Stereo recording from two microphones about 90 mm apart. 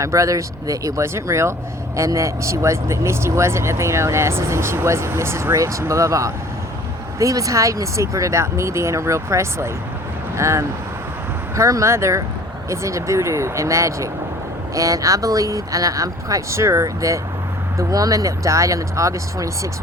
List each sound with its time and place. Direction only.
0.0 s speech: 35° right (ahead or behind)